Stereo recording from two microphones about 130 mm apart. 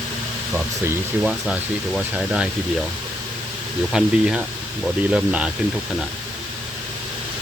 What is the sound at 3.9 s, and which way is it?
Speech, 5° right (ahead or behind).